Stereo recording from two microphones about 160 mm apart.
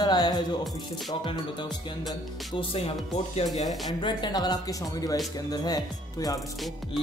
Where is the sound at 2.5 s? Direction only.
35° left (ahead or behind).